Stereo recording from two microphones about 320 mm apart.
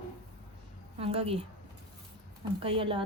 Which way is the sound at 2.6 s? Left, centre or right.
Centre.